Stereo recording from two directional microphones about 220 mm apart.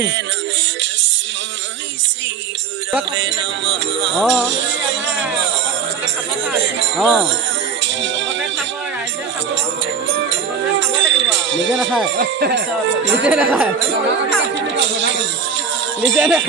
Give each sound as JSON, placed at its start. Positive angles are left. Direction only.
{"t": 4.1, "sound": "speech", "side_deg": 0}
{"t": 7.0, "sound": "speech", "side_deg": 0}
{"t": 8.0, "sound": "music", "side_deg": -55}
{"t": 10.8, "sound": "music", "side_deg": -55}
{"t": 11.8, "sound": "speech", "side_deg": 0}
{"t": 12.1, "sound": "speech", "side_deg": -45}
{"t": 13.2, "sound": "speech", "side_deg": -5}
{"t": 14.8, "sound": "music", "side_deg": -55}
{"t": 16.1, "sound": "speech", "side_deg": -5}